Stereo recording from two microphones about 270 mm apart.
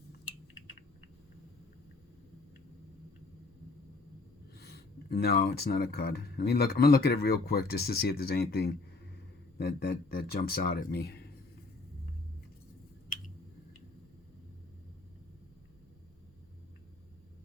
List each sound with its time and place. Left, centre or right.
4.6 s speech: left